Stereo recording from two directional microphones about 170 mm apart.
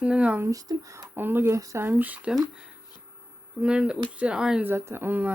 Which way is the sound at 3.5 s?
5° right (ahead or behind).